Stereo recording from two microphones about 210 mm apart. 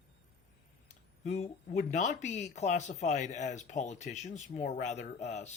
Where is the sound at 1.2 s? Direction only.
30° left (ahead or behind).